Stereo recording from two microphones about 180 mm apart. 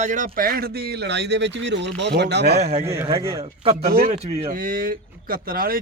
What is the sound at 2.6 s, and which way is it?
Speech, 35° right (ahead or behind).